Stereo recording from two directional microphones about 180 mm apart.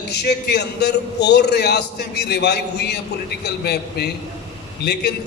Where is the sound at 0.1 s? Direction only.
65° left (ahead or behind).